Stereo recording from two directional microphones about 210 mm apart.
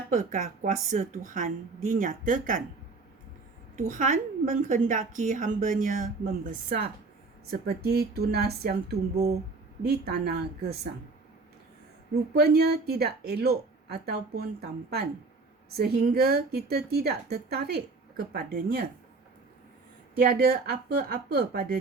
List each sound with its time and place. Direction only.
0.1 s a woman's voice: 40° right (ahead or behind)
3.8 s a woman's voice: 35° right (ahead or behind)
12.1 s a woman's voice: 50° right (ahead or behind)
20.3 s a woman's voice: 45° right (ahead or behind)